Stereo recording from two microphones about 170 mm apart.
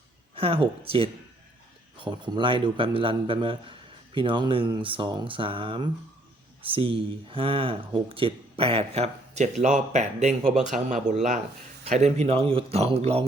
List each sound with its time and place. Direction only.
0.3 s a man's voice: 35° right (ahead or behind)